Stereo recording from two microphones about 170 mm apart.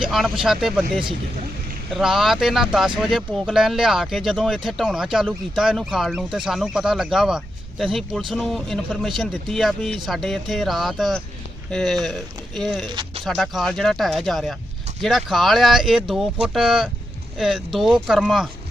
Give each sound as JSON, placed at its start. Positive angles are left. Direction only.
{"t": 0.0, "sound": "speech", "side_deg": 0}
{"t": 1.9, "sound": "speech", "side_deg": 0}
{"t": 12.9, "sound": "a sound", "side_deg": -25}
{"t": 13.2, "sound": "speech", "side_deg": 0}